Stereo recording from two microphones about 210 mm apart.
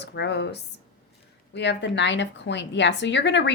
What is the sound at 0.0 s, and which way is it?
A woman's voice, 55° left (ahead or behind).